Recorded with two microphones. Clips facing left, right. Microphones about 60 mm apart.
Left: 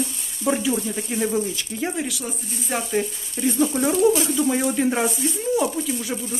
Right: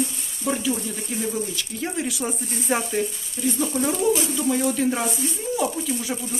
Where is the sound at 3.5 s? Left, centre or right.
Centre.